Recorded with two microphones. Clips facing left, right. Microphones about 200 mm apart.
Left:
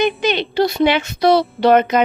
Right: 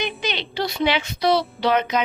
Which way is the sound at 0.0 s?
50° left (ahead or behind).